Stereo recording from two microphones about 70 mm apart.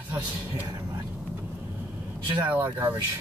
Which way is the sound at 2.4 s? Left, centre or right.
Right.